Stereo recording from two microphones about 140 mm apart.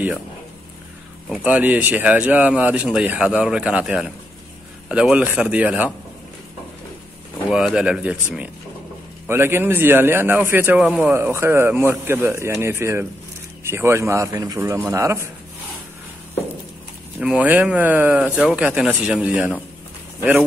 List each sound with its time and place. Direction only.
1.3 s speech: 10° right (ahead or behind)
7.4 s speech: 5° right (ahead or behind)
10.8 s speech: 5° right (ahead or behind)
11.1 s speech: 15° right (ahead or behind)
17.2 s speech: 10° right (ahead or behind)